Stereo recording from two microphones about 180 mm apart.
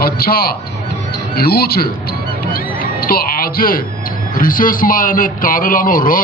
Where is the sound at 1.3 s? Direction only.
60° left (ahead or behind).